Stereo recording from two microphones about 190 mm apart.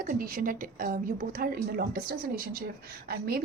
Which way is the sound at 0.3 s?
45° right (ahead or behind).